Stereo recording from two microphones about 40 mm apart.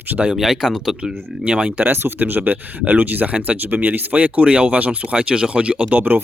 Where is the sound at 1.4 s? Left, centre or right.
Right.